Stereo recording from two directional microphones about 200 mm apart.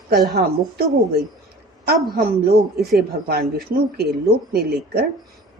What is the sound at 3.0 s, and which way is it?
Speech, 50° right (ahead or behind).